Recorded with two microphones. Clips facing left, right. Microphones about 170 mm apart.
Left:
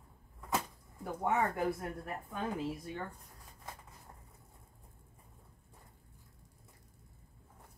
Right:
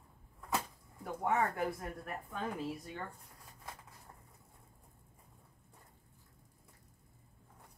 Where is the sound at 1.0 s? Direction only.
Centre (ahead or behind).